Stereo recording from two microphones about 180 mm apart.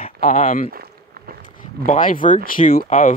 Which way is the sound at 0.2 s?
45° left (ahead or behind).